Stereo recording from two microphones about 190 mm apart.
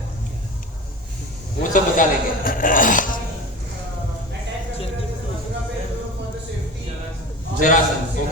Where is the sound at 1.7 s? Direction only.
45° left (ahead or behind).